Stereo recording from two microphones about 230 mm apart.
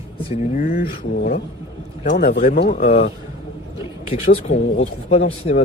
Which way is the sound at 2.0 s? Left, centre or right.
Left.